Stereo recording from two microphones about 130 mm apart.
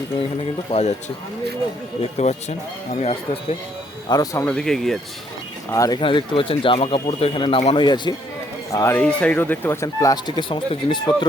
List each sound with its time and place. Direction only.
0.7 s speech: 55° left (ahead or behind)
2.0 s speech: 55° left (ahead or behind)
4.1 s speech: 30° left (ahead or behind)
4.4 s speech: 5° left (ahead or behind)
5.7 s speech: 25° left (ahead or behind)
6.0 s speech: 40° left (ahead or behind)
8.7 s speech: 25° left (ahead or behind)
9.0 s speech: 10° left (ahead or behind); by 11.3 s 40° left (ahead or behind)